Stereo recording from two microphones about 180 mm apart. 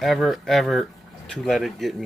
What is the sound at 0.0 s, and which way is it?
Speech, centre (ahead or behind).